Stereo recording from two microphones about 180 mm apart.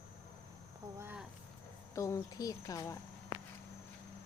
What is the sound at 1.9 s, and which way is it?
Speech, 15° left (ahead or behind).